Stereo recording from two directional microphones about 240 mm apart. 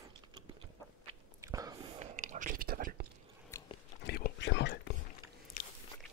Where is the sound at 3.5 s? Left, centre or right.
Centre.